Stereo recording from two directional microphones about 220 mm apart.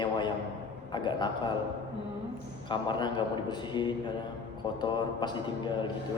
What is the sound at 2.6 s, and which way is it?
Speech, 20° left (ahead or behind).